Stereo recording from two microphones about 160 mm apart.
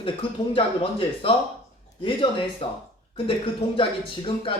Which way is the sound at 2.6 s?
35° left (ahead or behind).